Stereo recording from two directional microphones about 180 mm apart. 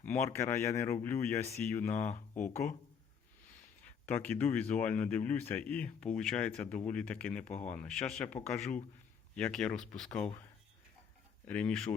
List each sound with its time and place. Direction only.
0.0 s speech: 10° left (ahead or behind)
4.0 s speech: 10° left (ahead or behind)
11.4 s speech: 5° left (ahead or behind)